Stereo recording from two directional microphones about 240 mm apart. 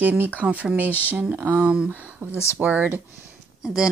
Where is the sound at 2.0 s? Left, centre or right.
Centre.